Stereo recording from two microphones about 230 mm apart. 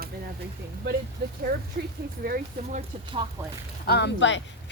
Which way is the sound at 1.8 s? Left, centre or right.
Right.